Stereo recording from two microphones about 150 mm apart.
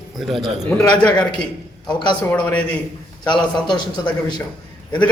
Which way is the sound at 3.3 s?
30° left (ahead or behind).